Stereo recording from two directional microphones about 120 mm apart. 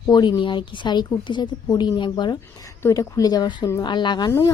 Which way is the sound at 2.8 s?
25° left (ahead or behind).